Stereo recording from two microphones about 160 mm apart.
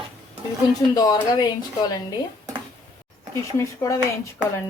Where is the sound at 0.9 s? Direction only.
25° left (ahead or behind).